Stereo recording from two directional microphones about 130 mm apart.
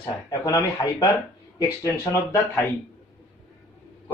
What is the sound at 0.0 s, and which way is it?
A man's voice, 30° left (ahead or behind).